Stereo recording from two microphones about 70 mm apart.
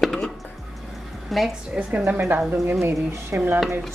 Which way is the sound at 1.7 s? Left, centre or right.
Centre.